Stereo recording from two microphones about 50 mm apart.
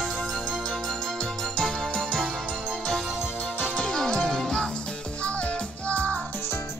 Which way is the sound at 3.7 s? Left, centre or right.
Centre.